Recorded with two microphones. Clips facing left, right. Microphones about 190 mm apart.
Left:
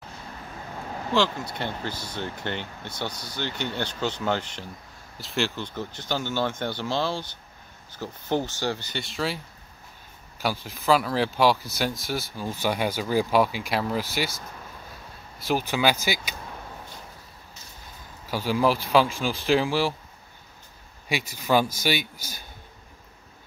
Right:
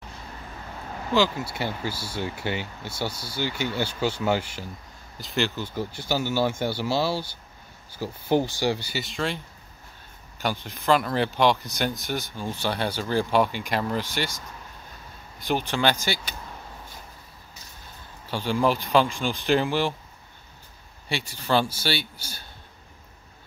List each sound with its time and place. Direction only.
1.1 s speech: 5° right (ahead or behind)
10.4 s speech: 5° left (ahead or behind)
15.3 s speech: 5° left (ahead or behind)
18.3 s speech: 5° left (ahead or behind)
21.1 s speech: 10° left (ahead or behind)